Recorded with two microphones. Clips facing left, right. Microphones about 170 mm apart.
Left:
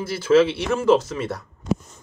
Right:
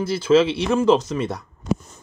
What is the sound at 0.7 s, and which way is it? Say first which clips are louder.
Speech: right 1 dB; 15° right (ahead or behind).